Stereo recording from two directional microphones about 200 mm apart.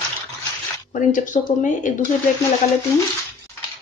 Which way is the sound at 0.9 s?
40° left (ahead or behind).